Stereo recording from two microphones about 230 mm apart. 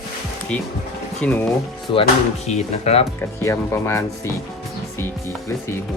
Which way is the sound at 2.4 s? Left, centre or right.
Left.